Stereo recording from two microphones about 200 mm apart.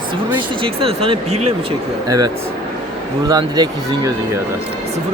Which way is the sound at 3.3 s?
20° right (ahead or behind).